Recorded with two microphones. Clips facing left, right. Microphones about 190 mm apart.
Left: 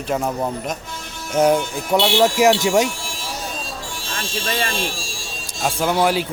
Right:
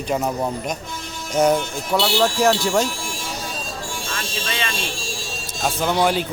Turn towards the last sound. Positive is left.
turn(degrees=5)  # may be behind; listen again after turning